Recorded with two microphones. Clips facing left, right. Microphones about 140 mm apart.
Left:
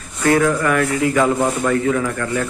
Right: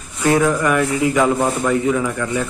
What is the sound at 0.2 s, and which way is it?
Speech, 20° right (ahead or behind).